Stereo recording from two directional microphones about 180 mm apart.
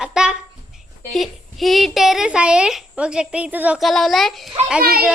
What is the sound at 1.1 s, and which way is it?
A woman's voice, centre (ahead or behind).